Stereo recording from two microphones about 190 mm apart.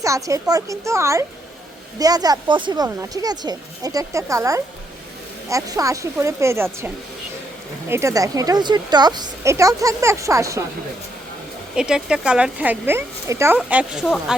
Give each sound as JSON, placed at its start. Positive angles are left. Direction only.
{"t": 0.0, "sound": "a woman's voice", "side_deg": -15}
{"t": 11.7, "sound": "a woman's voice", "side_deg": -5}